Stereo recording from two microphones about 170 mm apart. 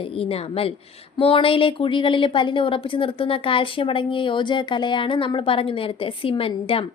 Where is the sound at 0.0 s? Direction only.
35° left (ahead or behind).